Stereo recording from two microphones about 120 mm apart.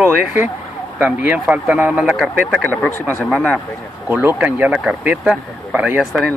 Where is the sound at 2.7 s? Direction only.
20° left (ahead or behind).